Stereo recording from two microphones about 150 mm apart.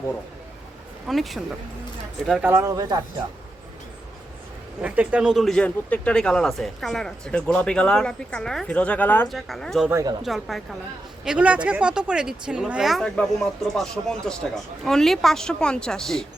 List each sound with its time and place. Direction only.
1.0 s speech: centre (ahead or behind)
2.4 s speech: 15° right (ahead or behind)
4.8 s speech: 10° right (ahead or behind)
9.9 s speech: 25° right (ahead or behind)
10.2 s speech: centre (ahead or behind)